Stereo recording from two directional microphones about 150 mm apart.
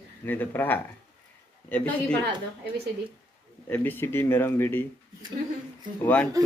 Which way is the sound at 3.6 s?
10° left (ahead or behind).